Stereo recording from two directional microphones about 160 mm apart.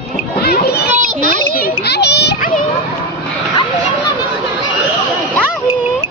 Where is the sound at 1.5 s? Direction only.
75° left (ahead or behind).